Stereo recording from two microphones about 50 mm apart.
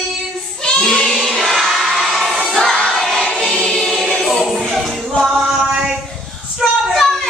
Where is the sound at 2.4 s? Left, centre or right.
Centre.